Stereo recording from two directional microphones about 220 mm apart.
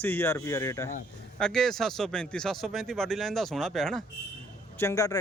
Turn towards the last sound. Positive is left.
turn(degrees=15)  # may be behind; listen again after turning